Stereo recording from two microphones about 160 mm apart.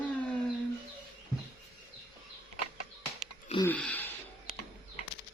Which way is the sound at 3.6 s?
10° left (ahead or behind).